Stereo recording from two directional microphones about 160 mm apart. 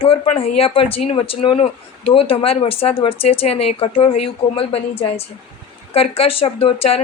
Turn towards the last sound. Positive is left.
turn(degrees=40)  # may be behind; listen again after turning